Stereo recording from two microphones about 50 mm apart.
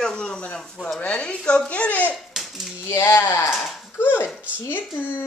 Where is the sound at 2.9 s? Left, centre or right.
Left.